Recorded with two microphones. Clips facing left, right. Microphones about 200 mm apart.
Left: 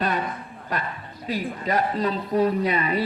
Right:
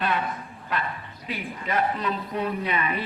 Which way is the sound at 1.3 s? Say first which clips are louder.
Left 4 dB; 35° left (ahead or behind).